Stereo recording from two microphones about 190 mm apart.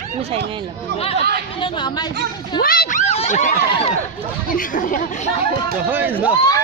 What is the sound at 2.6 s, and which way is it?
Speech, 50° left (ahead or behind).